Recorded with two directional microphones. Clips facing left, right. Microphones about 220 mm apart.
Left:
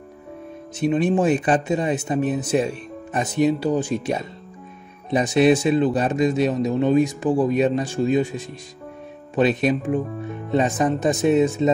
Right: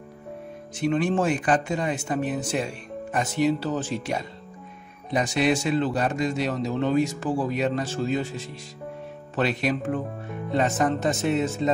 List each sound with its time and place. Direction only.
0.7 s a man's voice: 20° left (ahead or behind)